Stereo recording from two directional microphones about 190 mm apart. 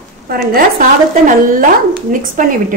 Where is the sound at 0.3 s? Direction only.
55° right (ahead or behind).